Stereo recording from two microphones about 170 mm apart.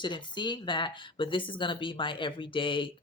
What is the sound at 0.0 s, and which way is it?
Speech, 25° left (ahead or behind).